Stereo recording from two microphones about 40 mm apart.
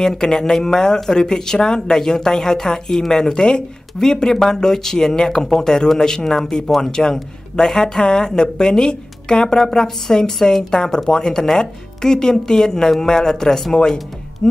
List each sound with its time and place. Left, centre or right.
0.0 s speech: centre